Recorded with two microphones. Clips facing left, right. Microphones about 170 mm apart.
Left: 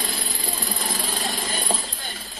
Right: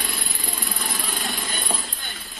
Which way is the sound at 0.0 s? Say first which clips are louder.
Left 2 dB; 35° left (ahead or behind).